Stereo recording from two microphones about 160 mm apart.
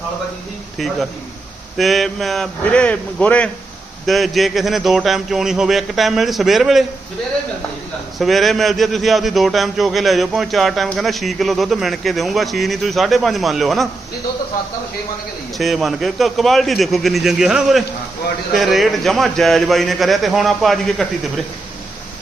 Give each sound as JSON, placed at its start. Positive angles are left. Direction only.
{"t": 1.8, "sound": "a man's voice", "side_deg": 0}
{"t": 8.2, "sound": "a man's voice", "side_deg": 0}
{"t": 15.5, "sound": "a man's voice", "side_deg": 0}